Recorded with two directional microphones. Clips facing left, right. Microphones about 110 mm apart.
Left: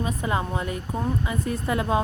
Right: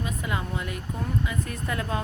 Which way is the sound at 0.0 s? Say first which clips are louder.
Left 5 dB; 30° left (ahead or behind).